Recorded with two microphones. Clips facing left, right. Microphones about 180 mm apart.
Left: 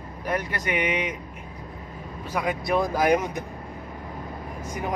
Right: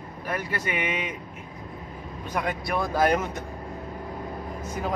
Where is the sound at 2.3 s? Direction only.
10° left (ahead or behind).